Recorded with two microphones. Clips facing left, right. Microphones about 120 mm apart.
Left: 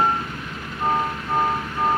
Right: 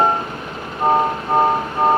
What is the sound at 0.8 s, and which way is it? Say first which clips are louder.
Music: right 7 dB; 40° right (ahead or behind).